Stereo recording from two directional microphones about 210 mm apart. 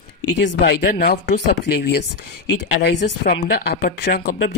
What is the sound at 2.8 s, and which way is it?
Speech, 50° left (ahead or behind).